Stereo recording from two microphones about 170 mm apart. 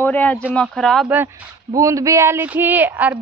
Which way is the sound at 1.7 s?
20° right (ahead or behind).